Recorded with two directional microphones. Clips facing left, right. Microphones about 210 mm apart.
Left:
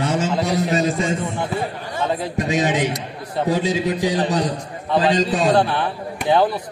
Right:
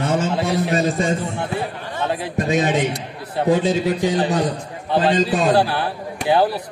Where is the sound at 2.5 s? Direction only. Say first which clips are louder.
Right 1 dB; 55° right (ahead or behind).